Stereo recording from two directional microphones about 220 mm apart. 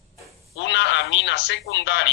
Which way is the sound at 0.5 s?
50° left (ahead or behind).